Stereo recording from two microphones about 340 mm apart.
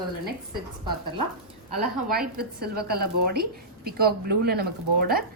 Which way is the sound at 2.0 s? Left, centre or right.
Right.